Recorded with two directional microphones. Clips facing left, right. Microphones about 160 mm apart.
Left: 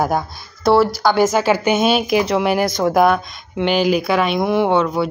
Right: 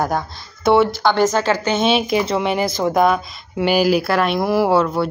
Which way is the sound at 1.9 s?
Centre (ahead or behind).